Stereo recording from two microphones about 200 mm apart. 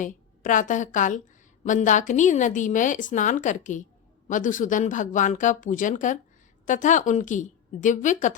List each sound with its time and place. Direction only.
0.0 s a woman's voice: 40° left (ahead or behind)